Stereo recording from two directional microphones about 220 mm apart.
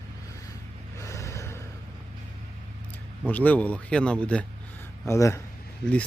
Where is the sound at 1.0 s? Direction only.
15° left (ahead or behind).